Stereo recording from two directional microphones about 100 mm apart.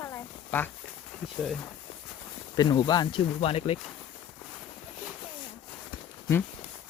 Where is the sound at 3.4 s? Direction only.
80° left.